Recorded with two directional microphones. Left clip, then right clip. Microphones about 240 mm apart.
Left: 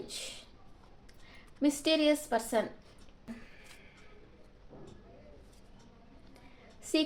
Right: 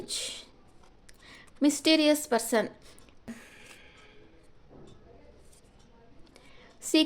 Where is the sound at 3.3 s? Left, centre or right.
Right.